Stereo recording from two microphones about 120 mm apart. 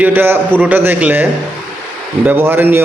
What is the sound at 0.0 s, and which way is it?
A man's voice, 15° right (ahead or behind).